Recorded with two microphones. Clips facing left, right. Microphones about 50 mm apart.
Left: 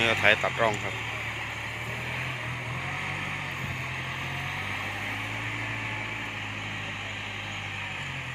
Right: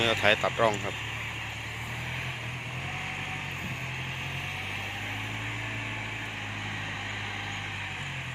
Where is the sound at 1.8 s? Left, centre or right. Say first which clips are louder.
Left 2 dB; left.